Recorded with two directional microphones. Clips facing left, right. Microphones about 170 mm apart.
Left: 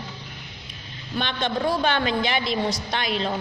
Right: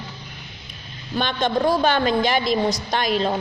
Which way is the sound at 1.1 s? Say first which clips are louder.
Right 4 dB; 40° right (ahead or behind).